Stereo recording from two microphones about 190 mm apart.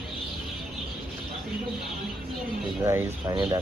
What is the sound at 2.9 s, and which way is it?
Speech, 15° right (ahead or behind).